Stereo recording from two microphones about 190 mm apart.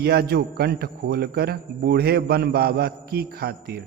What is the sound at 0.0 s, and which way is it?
A man's voice, 60° right (ahead or behind).